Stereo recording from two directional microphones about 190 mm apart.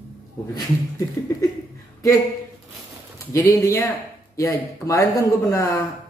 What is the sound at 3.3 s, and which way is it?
Speech, 15° left (ahead or behind).